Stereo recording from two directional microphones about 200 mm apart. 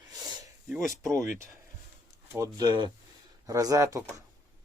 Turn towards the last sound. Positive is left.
turn(degrees=-15)  # may be behind; listen again after turning